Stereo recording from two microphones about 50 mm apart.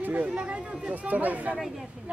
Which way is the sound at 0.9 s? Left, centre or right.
Right.